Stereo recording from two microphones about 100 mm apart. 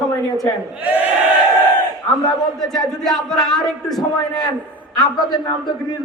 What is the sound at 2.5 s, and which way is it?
A man's voice, 5° left (ahead or behind).